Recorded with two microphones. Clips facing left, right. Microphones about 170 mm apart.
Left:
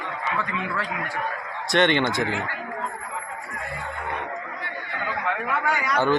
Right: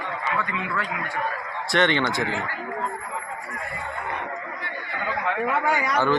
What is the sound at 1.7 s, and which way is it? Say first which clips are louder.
Speech: left 2 dB; 20° left (ahead or behind).